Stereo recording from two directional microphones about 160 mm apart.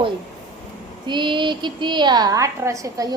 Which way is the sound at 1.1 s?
30° right (ahead or behind).